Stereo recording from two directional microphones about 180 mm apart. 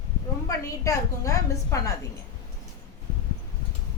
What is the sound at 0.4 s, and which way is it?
A woman's voice, 15° left (ahead or behind).